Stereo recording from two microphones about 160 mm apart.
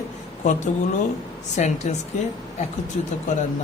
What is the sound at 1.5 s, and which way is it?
Speech, 45° left (ahead or behind).